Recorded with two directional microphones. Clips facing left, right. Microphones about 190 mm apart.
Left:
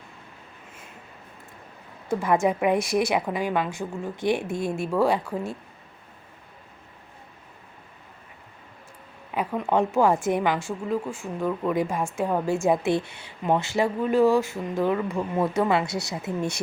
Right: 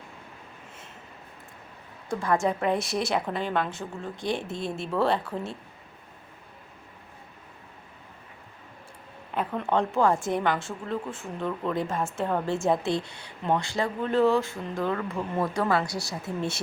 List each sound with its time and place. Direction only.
2.2 s speech: 20° left (ahead or behind)
9.3 s speech: 5° left (ahead or behind)
9.7 s speech: 15° left (ahead or behind)
10.5 s speech: 5° left (ahead or behind); by 13.9 s 20° left (ahead or behind)
14.0 s speech: 10° left (ahead or behind)